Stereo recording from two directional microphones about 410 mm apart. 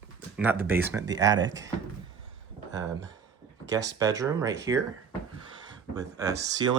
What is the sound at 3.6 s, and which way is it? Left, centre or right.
Speech, centre.